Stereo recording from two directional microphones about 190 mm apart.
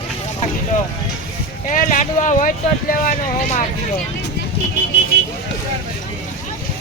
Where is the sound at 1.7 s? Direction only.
40° left (ahead or behind).